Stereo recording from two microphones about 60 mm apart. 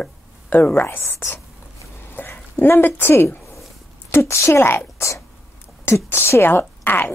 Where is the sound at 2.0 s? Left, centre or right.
Left.